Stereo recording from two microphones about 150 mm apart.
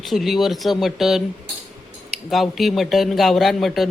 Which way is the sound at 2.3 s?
Centre (ahead or behind).